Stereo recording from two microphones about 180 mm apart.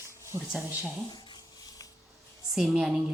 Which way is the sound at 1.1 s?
25° left (ahead or behind).